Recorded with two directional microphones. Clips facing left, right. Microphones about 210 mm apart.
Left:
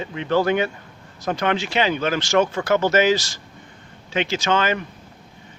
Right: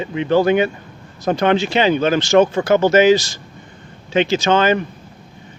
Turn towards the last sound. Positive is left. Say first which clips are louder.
# right 6 dB
turn(degrees=-25)  # may be behind; listen again after turning